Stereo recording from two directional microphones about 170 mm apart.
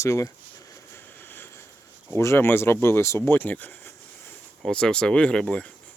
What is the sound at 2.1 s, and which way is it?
Speech, 15° left (ahead or behind).